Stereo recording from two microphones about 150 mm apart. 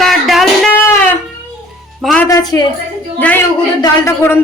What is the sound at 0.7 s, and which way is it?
Wind instrument, 15° left (ahead or behind).